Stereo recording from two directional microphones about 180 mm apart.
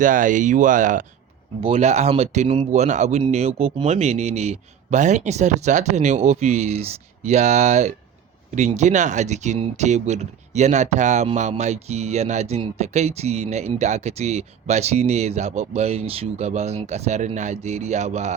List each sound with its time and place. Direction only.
0.0 s speech: 45° right (ahead or behind)
1.6 s speech: 35° right (ahead or behind)